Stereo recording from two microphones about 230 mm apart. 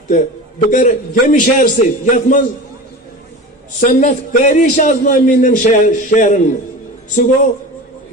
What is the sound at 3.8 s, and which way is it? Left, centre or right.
A man's voice, left.